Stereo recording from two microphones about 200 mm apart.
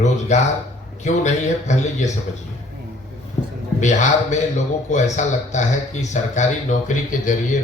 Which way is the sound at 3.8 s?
35° left (ahead or behind).